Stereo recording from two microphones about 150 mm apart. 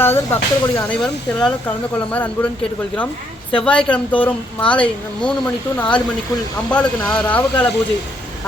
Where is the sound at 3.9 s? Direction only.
10° left (ahead or behind).